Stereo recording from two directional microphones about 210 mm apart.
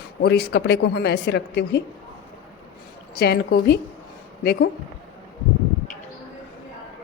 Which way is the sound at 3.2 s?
50° left (ahead or behind).